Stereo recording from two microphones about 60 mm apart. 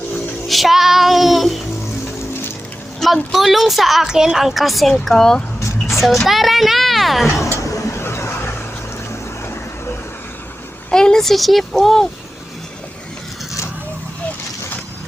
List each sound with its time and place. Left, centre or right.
0.4 s music: centre
3.0 s a woman's voice: centre
7.3 s speech: left
7.6 s a sound: left
7.9 s a sound: left
10.9 s a woman's voice: centre